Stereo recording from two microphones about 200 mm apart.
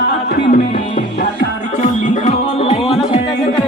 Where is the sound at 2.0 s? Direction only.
40° left (ahead or behind).